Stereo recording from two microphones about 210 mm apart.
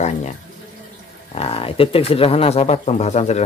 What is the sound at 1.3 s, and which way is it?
Speech, 25° left (ahead or behind).